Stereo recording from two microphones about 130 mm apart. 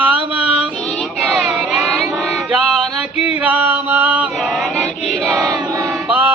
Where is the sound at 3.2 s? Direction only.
10° right (ahead or behind).